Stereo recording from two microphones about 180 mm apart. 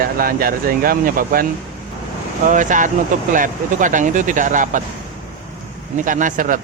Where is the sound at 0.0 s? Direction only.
55° right (ahead or behind).